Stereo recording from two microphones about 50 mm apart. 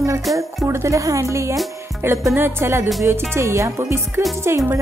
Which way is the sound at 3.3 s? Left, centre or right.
Right.